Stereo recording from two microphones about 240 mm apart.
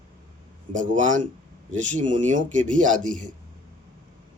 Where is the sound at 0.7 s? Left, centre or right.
Right.